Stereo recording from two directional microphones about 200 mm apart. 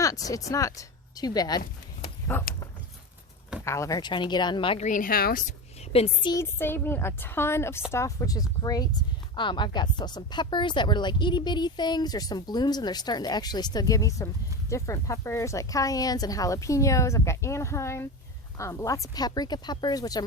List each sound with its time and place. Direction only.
0.0 s a woman's voice: 15° left (ahead or behind)
3.6 s speech: 15° left (ahead or behind)
4.9 s a woman's voice: 45° left (ahead or behind)
5.9 s speech: 30° left (ahead or behind)
6.3 s a woman's voice: 10° left (ahead or behind)